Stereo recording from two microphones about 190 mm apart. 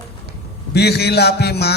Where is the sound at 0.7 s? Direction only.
60° left (ahead or behind).